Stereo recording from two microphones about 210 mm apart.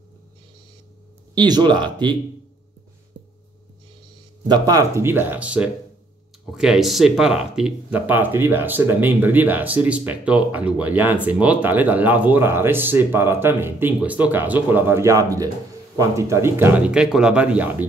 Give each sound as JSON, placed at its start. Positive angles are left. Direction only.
{"t": 1.3, "sound": "speech", "side_deg": -20}
{"t": 4.5, "sound": "speech", "side_deg": -15}